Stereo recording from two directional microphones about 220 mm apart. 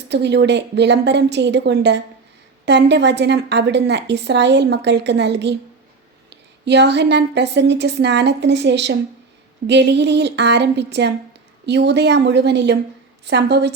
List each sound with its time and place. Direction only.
0.1 s a woman's voice: 50° right (ahead or behind)